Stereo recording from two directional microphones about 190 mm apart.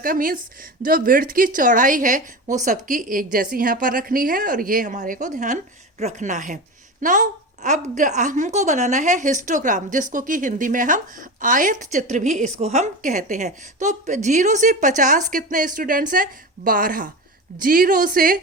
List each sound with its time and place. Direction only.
0.0 s a woman's voice: 45° right (ahead or behind)